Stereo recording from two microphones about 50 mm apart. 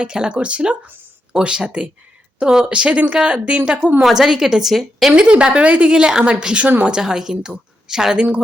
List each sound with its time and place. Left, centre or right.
0.0 s a woman's voice: centre
4.0 s a woman's voice: centre
5.1 s a woman's voice: right